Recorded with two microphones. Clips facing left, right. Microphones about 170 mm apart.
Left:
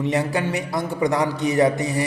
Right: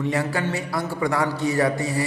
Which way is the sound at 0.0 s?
20° left (ahead or behind).